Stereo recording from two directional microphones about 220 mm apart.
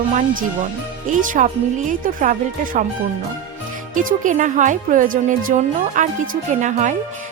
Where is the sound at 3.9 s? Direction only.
35° right (ahead or behind).